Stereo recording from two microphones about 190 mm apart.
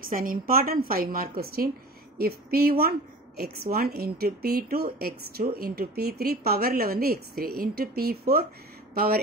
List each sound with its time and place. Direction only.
0.1 s speech: 45° right (ahead or behind)